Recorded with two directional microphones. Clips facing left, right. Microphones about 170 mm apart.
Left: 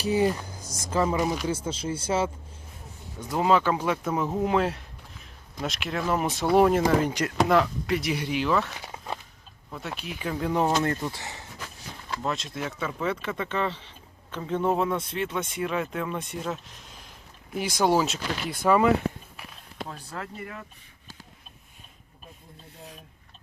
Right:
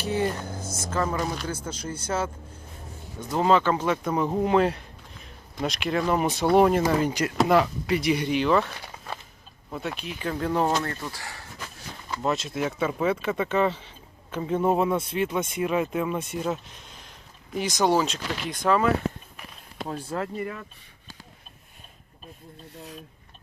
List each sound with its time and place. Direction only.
0.8 s speech: 10° left (ahead or behind)
9.7 s speech: 5° left (ahead or behind); by 11.4 s 20° left (ahead or behind)
12.2 s speech: 5° right (ahead or behind)
16.4 s a sound: centre (ahead or behind)
17.6 s speech: 10° left (ahead or behind)
19.9 s speech: 35° right (ahead or behind)